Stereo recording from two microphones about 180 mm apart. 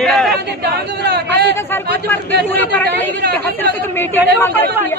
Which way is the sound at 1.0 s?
70° right (ahead or behind).